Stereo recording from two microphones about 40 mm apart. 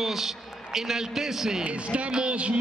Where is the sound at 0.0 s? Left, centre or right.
Centre.